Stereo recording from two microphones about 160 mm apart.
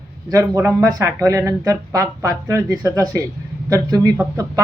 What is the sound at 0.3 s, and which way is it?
Speech, 20° right (ahead or behind).